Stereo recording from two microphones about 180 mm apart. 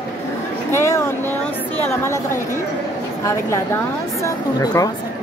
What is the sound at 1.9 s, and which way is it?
A woman's voice, 15° left (ahead or behind).